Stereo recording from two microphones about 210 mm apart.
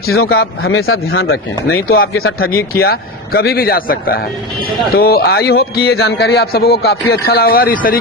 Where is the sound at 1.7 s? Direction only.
45° left (ahead or behind).